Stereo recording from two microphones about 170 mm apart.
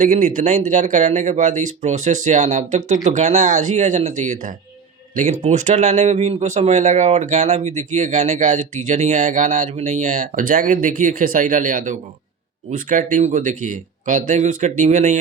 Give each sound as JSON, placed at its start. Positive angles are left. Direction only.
{"t": 0.0, "sound": "speech", "side_deg": -50}